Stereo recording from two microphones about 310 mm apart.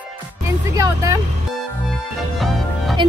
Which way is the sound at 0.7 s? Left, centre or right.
Centre.